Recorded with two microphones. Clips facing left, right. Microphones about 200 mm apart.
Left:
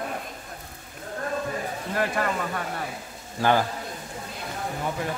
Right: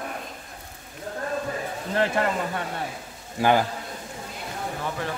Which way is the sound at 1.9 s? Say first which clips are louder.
Right 3 dB; 25° right (ahead or behind).